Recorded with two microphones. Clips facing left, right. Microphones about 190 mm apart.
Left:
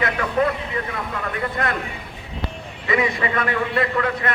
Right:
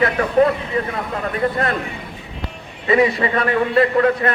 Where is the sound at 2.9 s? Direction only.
35° right (ahead or behind).